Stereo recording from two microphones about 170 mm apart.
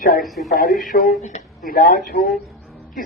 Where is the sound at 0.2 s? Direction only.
Centre (ahead or behind).